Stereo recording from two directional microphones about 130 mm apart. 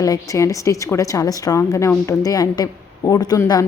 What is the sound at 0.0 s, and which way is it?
A woman's voice, 25° left (ahead or behind).